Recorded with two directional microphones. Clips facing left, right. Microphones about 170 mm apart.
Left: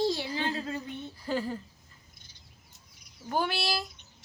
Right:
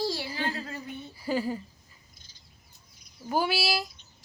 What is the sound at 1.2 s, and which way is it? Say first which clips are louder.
Speech: right 3 dB; 10° right (ahead or behind).